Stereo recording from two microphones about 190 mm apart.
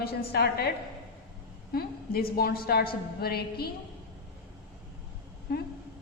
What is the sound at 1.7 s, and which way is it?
A woman's voice, 50° left (ahead or behind).